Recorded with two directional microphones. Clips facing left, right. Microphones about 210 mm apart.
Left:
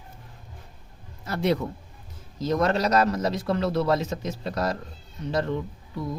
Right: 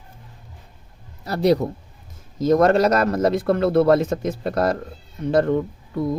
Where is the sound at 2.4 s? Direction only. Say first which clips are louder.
Right 8 dB; 50° right (ahead or behind).